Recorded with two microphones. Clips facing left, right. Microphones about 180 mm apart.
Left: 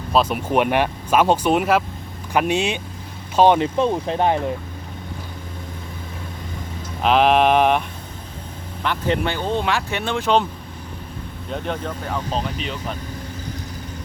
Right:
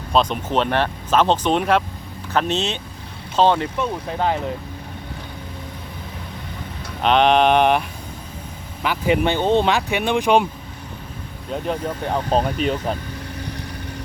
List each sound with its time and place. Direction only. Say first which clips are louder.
0.1 s speech: left 1 dB; 5° left (ahead or behind)
7.0 s mantra: even; 5° left (ahead or behind)
8.8 s speech: right 3 dB; 10° right (ahead or behind)
9.3 s speech: right 5 dB; 25° right (ahead or behind)
12.0 s speech: right 7 dB; 40° right (ahead or behind)